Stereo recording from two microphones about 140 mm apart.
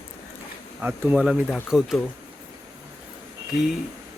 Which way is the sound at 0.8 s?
15° right (ahead or behind).